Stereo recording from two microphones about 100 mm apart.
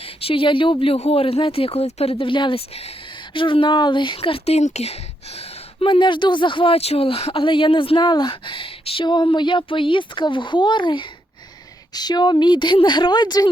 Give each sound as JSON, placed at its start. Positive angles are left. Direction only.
{"t": 0.0, "sound": "speech", "side_deg": 75}
{"t": 3.3, "sound": "speech", "side_deg": 55}
{"t": 9.0, "sound": "speech", "side_deg": 50}